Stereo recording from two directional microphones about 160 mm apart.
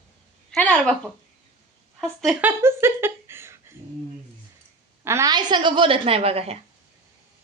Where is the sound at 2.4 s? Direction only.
15° right (ahead or behind).